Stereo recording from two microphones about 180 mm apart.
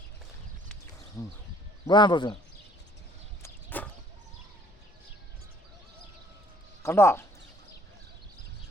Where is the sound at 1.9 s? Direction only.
25° left (ahead or behind).